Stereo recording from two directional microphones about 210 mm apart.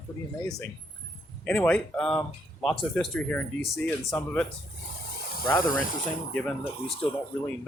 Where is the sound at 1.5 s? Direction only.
5° left (ahead or behind).